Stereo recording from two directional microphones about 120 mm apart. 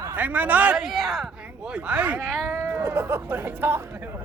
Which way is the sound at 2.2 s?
5° left (ahead or behind).